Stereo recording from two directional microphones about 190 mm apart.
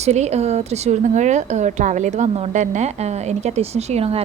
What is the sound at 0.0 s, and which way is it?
A woman's voice, 35° right (ahead or behind).